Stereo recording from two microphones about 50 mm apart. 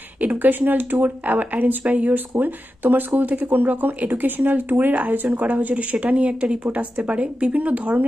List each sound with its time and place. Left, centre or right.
0.2 s speech: right